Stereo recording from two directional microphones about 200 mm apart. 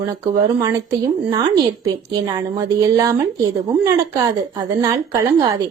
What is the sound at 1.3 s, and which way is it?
A woman's voice, 20° right (ahead or behind).